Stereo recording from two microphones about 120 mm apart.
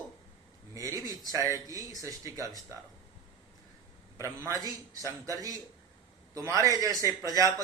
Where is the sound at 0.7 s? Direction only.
30° right (ahead or behind).